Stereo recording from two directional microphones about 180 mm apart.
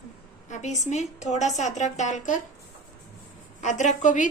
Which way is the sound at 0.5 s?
40° left (ahead or behind).